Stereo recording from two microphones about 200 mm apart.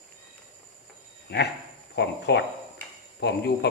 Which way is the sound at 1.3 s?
55° left (ahead or behind).